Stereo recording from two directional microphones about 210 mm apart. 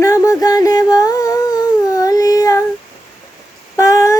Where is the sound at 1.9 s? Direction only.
15° left (ahead or behind).